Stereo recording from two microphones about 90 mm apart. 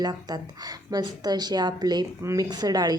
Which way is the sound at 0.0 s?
50° right (ahead or behind).